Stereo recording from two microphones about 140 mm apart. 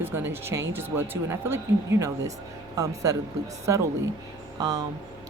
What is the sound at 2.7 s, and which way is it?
Speech, 25° right (ahead or behind).